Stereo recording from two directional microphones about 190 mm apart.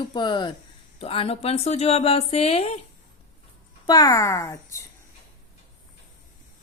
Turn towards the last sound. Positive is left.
turn(degrees=15)  # may be behind; listen again after turning